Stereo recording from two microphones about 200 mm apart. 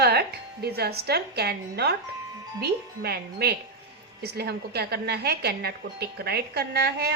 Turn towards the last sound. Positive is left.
turn(degrees=-55)  # may be behind; listen again after turning